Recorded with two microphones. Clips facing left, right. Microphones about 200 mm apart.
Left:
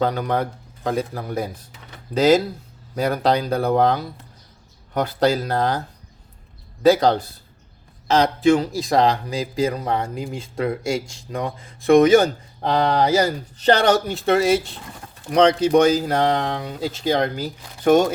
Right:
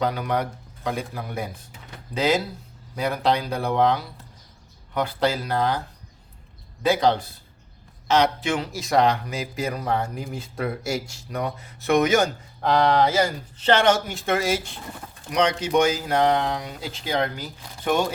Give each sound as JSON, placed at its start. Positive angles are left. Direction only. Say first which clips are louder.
{"t": 0.0, "sound": "speech", "louder": "left 3 dB", "side_deg": 40}
{"t": 6.8, "sound": "speech", "louder": "left 5 dB", "side_deg": 40}